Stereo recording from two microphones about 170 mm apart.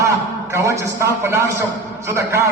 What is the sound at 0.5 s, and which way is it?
A man's voice, 20° right (ahead or behind).